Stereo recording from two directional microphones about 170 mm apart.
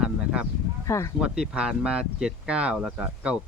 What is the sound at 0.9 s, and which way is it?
Speech, 15° left (ahead or behind).